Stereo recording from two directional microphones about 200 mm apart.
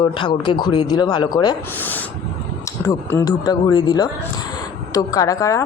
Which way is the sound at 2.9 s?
20° left (ahead or behind).